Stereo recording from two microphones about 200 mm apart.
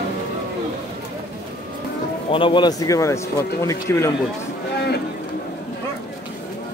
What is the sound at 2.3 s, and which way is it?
Speech, 25° left (ahead or behind).